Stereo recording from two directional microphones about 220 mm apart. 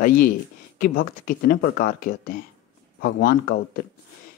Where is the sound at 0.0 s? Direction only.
40° left (ahead or behind).